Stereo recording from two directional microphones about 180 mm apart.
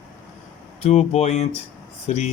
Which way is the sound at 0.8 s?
35° left (ahead or behind).